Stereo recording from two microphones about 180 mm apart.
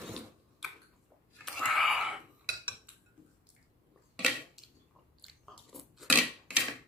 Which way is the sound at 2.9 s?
10° right (ahead or behind).